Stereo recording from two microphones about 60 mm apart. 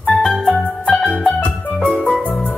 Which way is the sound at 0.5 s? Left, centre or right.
Centre.